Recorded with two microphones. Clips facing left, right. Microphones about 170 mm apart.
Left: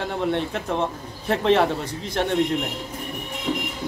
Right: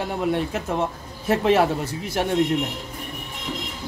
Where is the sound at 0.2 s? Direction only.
5° right (ahead or behind).